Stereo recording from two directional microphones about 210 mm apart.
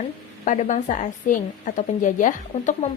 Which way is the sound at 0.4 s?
35° left (ahead or behind).